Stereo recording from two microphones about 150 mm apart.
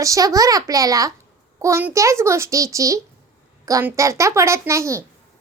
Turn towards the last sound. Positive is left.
turn(degrees=-20)  # may be behind; listen again after turning